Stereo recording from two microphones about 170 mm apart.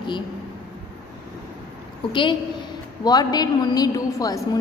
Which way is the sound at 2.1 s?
30° left (ahead or behind).